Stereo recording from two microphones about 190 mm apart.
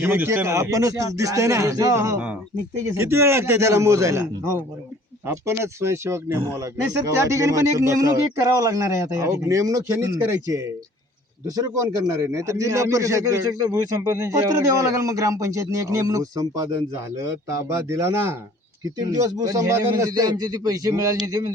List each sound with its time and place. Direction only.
0.0 s a man's voice: 10° right (ahead or behind)